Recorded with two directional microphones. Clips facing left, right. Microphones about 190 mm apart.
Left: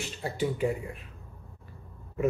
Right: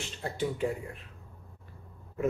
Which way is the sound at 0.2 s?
5° left (ahead or behind).